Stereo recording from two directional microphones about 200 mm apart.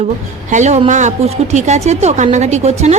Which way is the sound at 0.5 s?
35° right (ahead or behind).